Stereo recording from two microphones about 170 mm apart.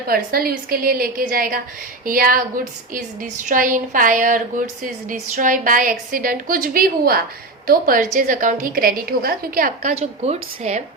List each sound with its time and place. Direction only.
0.1 s a woman's voice: 60° right (ahead or behind)
9.9 s a woman's voice: 40° right (ahead or behind)